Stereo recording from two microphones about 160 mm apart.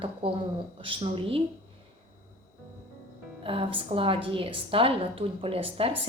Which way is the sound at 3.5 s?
35° right (ahead or behind).